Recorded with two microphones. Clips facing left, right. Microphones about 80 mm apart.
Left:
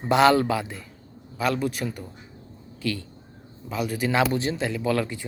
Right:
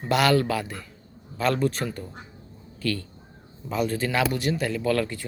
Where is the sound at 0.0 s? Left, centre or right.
Left.